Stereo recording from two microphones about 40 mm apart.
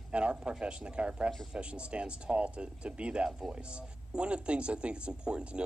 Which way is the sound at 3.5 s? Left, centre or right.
Right.